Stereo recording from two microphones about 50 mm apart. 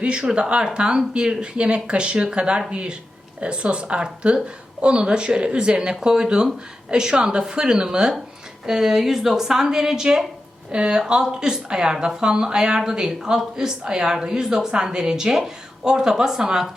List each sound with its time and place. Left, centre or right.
0.0 s a woman's voice: centre